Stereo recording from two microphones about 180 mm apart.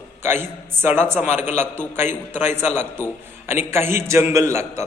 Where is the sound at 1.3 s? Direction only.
40° left (ahead or behind).